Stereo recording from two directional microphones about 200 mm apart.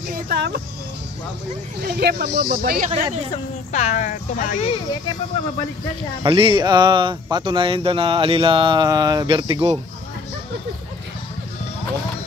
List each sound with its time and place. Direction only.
0.1 s speech: 50° right (ahead or behind)
1.8 s speech: 50° right (ahead or behind)
3.7 s speech: 35° left (ahead or behind)
6.2 s speech: 25° right (ahead or behind)